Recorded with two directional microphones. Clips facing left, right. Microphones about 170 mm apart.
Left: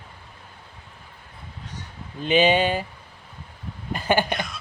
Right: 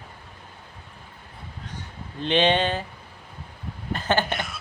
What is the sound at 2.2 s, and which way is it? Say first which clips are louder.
Speech: left 2 dB; 5° left (ahead or behind).